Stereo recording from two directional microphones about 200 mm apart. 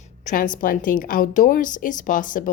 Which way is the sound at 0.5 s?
45° left (ahead or behind).